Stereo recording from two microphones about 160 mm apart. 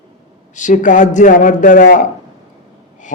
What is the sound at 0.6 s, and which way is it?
Speech, 50° left (ahead or behind).